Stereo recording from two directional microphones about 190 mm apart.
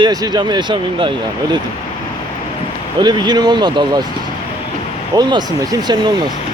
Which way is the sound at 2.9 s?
25° right (ahead or behind).